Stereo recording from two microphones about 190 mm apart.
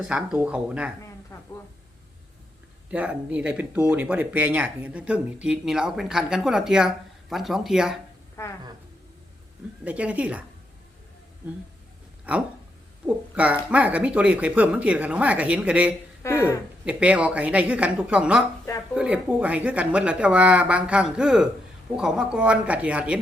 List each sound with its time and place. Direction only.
0.0 s speech: 5° right (ahead or behind)
1.3 s a sound: 15° left (ahead or behind)
2.9 s speech: 5° right (ahead or behind)
8.4 s a woman's voice: 15° left (ahead or behind)
9.8 s speech: 5° right (ahead or behind)
13.3 s speech: 5° right (ahead or behind)
16.2 s speech: 15° left (ahead or behind)
16.8 s speech: 5° right (ahead or behind)